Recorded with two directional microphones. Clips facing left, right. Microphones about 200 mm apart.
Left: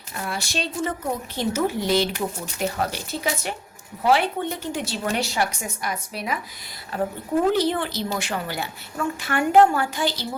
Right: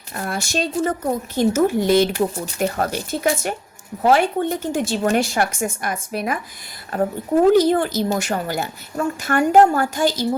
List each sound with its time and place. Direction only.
0.1 s a woman's voice: 50° right (ahead or behind)